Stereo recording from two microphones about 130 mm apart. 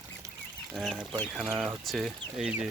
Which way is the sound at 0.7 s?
Centre (ahead or behind).